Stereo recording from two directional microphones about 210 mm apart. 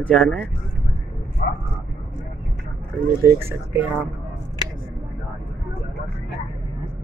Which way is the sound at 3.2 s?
10° right (ahead or behind).